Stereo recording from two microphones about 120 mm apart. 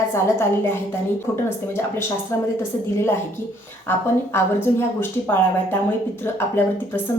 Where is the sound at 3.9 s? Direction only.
20° left (ahead or behind).